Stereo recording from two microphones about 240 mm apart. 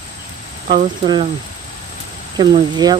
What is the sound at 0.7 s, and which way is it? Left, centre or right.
Speech, right.